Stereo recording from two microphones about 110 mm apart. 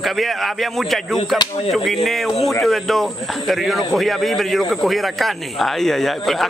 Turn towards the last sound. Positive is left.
turn(degrees=0)  # may be behind; listen again after turning